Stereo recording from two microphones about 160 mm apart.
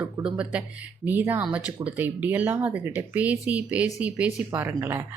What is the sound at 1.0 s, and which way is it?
Speech, 10° right (ahead or behind).